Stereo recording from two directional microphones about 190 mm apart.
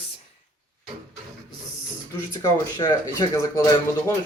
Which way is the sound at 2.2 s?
15° left (ahead or behind).